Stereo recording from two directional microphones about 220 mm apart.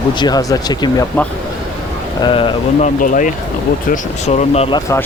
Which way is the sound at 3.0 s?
35° left (ahead or behind).